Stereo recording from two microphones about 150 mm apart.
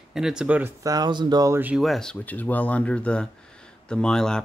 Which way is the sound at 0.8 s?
25° right (ahead or behind).